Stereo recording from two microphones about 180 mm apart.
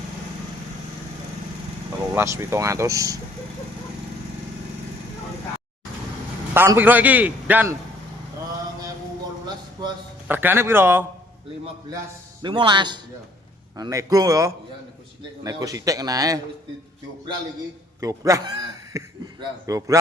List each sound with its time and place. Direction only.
2.1 s a man's voice: 15° right (ahead or behind)
6.5 s a man's voice: 10° right (ahead or behind)
10.2 s a man's voice: 10° right (ahead or behind)
12.4 s a man's voice: 25° right (ahead or behind)
18.0 s speech: 20° right (ahead or behind)